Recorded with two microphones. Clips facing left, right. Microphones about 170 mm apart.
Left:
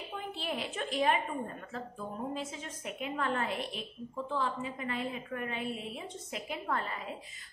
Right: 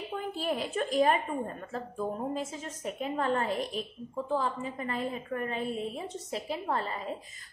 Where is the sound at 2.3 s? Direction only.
40° right (ahead or behind).